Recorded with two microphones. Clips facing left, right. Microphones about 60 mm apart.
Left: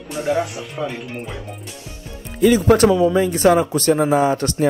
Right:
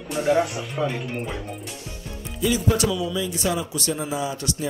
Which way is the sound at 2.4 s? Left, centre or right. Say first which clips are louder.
Left 9 dB; left.